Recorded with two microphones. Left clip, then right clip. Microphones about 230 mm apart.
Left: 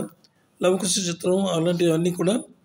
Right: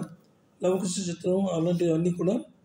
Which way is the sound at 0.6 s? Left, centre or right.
Left.